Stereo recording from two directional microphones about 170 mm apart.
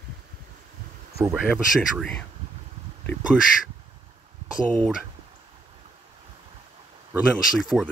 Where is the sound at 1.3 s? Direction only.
Centre (ahead or behind).